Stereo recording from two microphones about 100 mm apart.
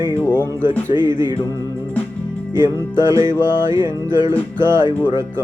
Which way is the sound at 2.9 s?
30° right (ahead or behind).